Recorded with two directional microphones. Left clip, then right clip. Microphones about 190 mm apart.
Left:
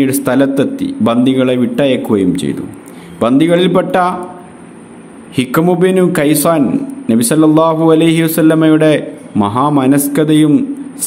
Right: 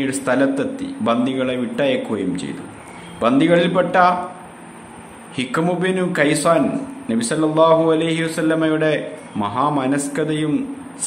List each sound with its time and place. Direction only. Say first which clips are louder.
0.0 s a man's voice: left 6 dB; 25° left (ahead or behind)
5.3 s a man's voice: left 8 dB; 30° left (ahead or behind)